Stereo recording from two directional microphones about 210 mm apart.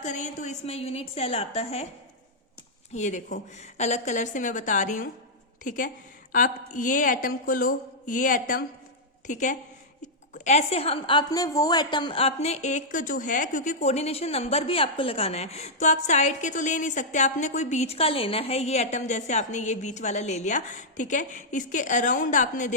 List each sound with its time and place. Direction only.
0.0 s a woman's voice: 35° left (ahead or behind)
2.9 s a woman's voice: 35° left (ahead or behind)